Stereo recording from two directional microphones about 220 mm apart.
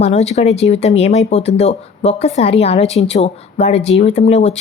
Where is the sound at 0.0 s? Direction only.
30° left (ahead or behind).